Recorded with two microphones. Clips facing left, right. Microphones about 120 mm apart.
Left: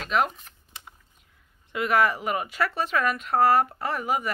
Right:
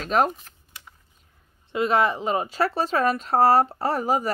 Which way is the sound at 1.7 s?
25° right (ahead or behind).